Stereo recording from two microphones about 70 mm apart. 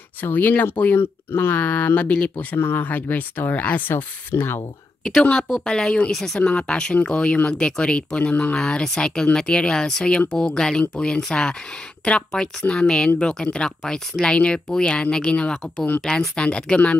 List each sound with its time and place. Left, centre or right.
0.2 s speech: left
5.0 s speech: centre
6.4 s speech: centre